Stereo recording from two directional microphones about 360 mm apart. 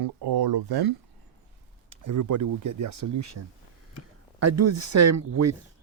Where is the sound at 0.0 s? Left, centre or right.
Right.